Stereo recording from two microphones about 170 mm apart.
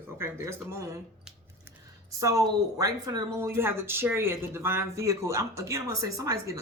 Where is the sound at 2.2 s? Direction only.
20° right (ahead or behind).